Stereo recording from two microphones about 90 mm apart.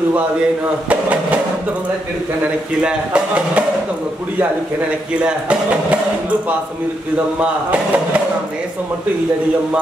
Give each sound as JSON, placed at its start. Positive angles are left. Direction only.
{"t": 2.4, "sound": "speech", "side_deg": -10}
{"t": 5.2, "sound": "speech", "side_deg": -15}
{"t": 7.3, "sound": "speech", "side_deg": -15}